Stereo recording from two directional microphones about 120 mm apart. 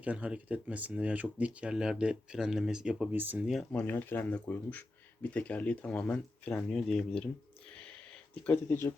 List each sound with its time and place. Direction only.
0.0 s speech: 10° right (ahead or behind)
3.4 s speech: centre (ahead or behind)
3.7 s speech: 15° left (ahead or behind)
8.4 s speech: 20° left (ahead or behind)